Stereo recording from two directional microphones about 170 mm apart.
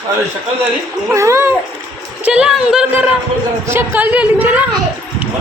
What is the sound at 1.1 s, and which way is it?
A woman's voice, 15° right (ahead or behind).